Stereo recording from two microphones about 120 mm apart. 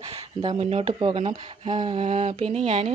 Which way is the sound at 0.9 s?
40° right (ahead or behind).